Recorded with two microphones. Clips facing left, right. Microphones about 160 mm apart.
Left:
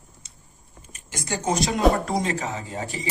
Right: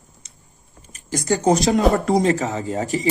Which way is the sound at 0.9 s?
40° right (ahead or behind).